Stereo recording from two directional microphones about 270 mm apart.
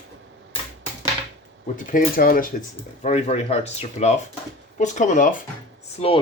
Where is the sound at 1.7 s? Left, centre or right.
Left.